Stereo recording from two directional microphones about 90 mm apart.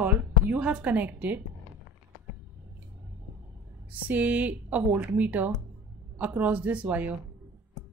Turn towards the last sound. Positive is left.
turn(degrees=-15)  # may be behind; listen again after turning